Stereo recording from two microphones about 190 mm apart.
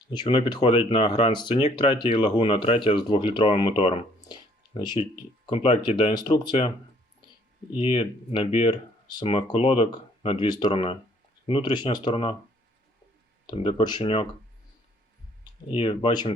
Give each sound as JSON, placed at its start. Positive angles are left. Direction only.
{"t": 0.1, "sound": "speech", "side_deg": 25}
{"t": 7.8, "sound": "speech", "side_deg": 25}
{"t": 13.5, "sound": "speech", "side_deg": 25}
{"t": 15.7, "sound": "speech", "side_deg": 25}